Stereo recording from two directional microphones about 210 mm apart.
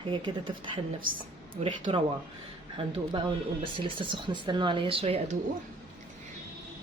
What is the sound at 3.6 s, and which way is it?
Speech, 25° right (ahead or behind).